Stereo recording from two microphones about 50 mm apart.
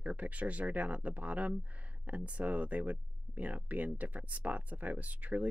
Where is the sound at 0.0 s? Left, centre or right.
Right.